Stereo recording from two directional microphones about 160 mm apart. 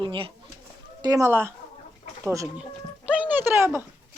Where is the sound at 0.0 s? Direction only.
30° right (ahead or behind).